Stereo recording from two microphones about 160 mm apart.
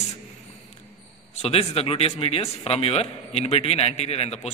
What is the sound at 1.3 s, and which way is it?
Speech, 40° left (ahead or behind).